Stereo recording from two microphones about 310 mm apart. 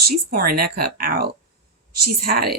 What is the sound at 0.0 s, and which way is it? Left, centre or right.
Speech, right.